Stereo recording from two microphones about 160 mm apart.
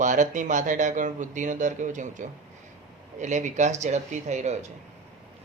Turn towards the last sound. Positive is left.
turn(degrees=-45)  # may be behind; listen again after turning